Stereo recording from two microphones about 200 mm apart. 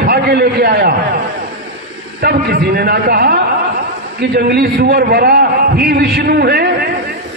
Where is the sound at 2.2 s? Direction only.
50° right (ahead or behind).